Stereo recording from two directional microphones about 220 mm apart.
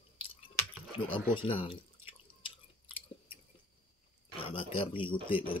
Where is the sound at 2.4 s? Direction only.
25° left (ahead or behind).